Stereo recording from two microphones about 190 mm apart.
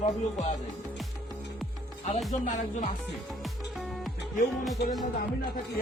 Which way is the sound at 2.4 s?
40° left (ahead or behind).